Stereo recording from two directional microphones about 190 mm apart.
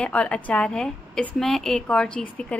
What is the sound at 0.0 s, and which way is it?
A woman's voice, 5° left (ahead or behind).